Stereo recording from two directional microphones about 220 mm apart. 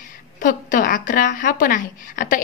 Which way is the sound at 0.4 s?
40° left (ahead or behind).